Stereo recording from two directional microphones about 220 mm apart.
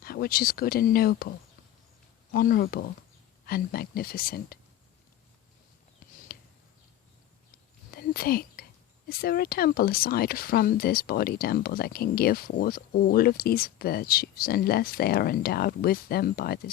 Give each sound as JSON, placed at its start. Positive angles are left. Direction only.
{"t": 0.0, "sound": "speech", "side_deg": 45}
{"t": 2.3, "sound": "speech", "side_deg": 40}
{"t": 6.3, "sound": "a sound", "side_deg": 40}
{"t": 7.9, "sound": "whispering", "side_deg": 45}
{"t": 9.0, "sound": "speech", "side_deg": 45}